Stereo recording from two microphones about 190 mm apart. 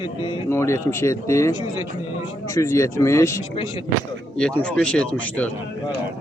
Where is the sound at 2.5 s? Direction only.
15° left (ahead or behind).